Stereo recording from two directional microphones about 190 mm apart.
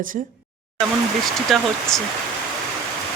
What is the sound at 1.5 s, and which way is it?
Speech, centre (ahead or behind).